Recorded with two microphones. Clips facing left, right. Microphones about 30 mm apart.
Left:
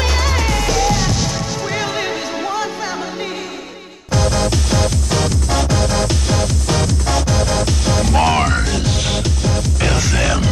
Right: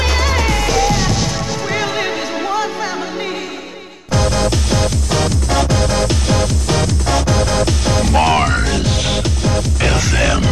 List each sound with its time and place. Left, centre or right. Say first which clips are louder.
0.0 s music: right 2 dB; right
4.1 s music: right 1 dB; right